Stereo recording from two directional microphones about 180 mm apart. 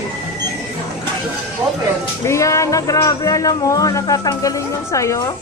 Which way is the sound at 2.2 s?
15° left (ahead or behind).